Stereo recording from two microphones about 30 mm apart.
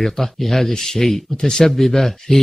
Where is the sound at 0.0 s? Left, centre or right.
Centre.